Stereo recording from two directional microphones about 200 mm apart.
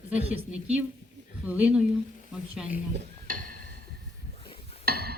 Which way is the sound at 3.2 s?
45° right (ahead or behind).